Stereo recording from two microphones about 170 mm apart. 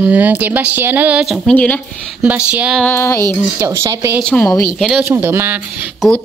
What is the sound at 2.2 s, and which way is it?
Speech, 10° right (ahead or behind).